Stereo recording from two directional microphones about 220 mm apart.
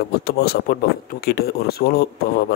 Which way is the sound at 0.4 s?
45° left (ahead or behind).